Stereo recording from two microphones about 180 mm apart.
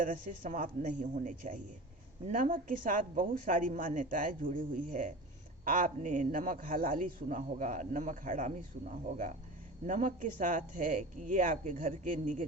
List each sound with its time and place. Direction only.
0.0 s a man's voice: 45° right (ahead or behind)